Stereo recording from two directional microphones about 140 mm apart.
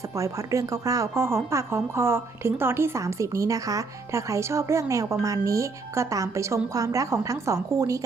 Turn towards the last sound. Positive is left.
turn(degrees=-25)  # may be behind; listen again after turning